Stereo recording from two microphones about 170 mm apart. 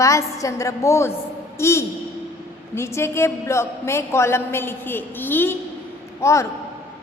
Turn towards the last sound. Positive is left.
turn(degrees=15)  # may be behind; listen again after turning